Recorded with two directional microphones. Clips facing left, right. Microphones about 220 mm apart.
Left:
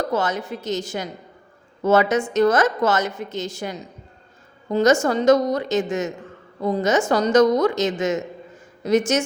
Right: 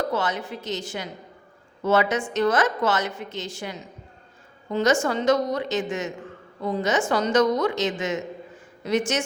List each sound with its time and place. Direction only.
0.1 s a woman's voice: 45° left (ahead or behind)